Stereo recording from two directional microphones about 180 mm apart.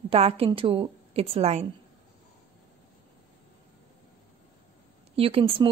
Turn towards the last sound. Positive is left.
turn(degrees=-30)  # may be behind; listen again after turning